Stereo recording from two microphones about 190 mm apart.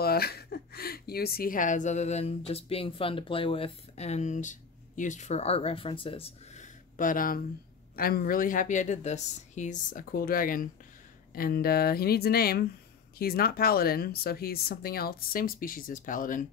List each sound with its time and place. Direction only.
0.0 s speech: 55° left (ahead or behind)